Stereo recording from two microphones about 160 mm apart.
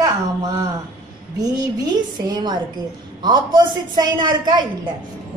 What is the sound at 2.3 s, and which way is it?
A woman's voice, 25° right (ahead or behind).